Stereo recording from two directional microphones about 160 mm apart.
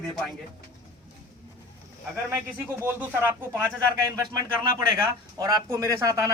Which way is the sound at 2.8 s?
15° right (ahead or behind).